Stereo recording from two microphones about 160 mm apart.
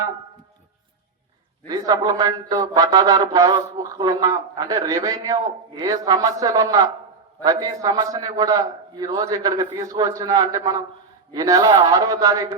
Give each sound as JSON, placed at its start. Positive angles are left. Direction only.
{"t": 1.6, "sound": "a man's voice", "side_deg": -25}